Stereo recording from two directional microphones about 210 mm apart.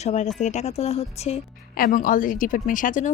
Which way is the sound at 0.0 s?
35° left (ahead or behind).